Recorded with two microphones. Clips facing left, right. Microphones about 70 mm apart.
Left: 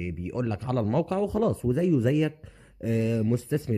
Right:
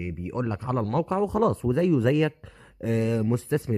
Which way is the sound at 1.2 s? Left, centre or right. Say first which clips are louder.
Right 2 dB; right.